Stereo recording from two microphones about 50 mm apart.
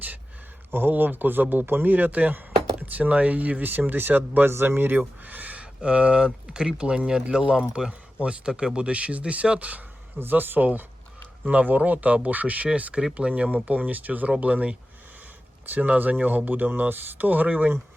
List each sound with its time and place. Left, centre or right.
0.7 s speech: right
5.8 s speech: right
10.2 s speech: right
15.7 s speech: right